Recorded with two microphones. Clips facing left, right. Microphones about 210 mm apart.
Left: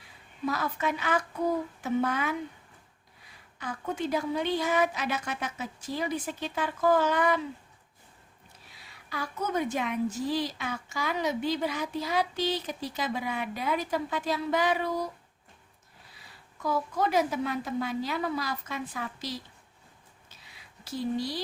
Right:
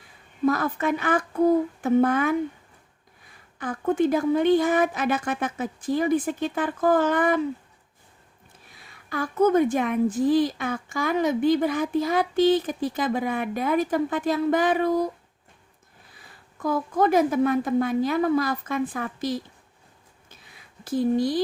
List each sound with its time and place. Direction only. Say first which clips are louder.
0.4 s a woman's voice: right 7 dB; 50° right (ahead or behind)
8.9 s a woman's voice: right 7 dB; 50° right (ahead or behind)
16.1 s a woman's voice: right 4 dB; 50° right (ahead or behind)
20.8 s a woman's voice: right 9 dB; 50° right (ahead or behind)